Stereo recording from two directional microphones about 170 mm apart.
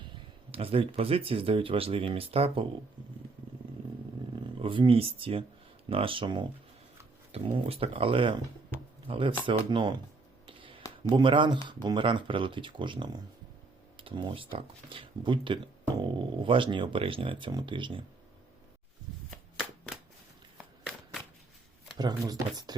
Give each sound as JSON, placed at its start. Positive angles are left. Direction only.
{"t": 0.5, "sound": "speech", "side_deg": -35}
{"t": 4.6, "sound": "speech", "side_deg": -30}
{"t": 10.4, "sound": "a sound", "side_deg": -30}
{"t": 11.1, "sound": "speech", "side_deg": -30}
{"t": 21.9, "sound": "speech", "side_deg": -25}